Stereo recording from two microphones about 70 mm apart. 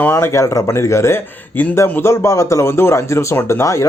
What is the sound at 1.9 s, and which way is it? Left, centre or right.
A man's voice, left.